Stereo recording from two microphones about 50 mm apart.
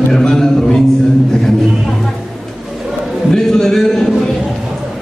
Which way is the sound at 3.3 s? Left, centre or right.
Centre.